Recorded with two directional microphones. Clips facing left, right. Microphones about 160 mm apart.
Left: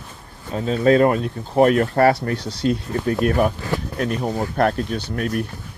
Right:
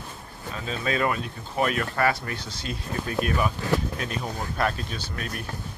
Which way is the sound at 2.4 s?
70° left (ahead or behind).